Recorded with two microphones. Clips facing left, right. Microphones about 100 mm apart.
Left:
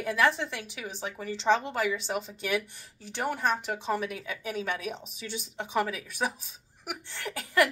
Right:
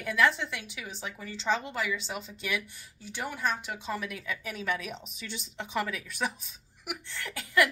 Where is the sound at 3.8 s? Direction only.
35° left (ahead or behind).